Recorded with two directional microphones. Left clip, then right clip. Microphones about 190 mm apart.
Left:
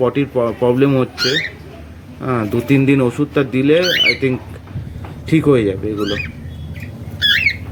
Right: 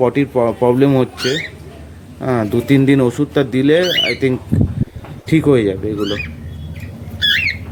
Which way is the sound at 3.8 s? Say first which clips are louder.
Left 1 dB; centre (ahead or behind).